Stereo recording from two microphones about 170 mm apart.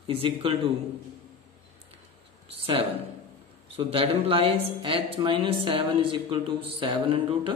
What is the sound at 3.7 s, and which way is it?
Speech, 35° right (ahead or behind).